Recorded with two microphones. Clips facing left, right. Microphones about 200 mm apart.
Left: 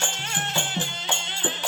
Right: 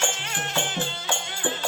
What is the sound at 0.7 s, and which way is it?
Music, 20° left (ahead or behind).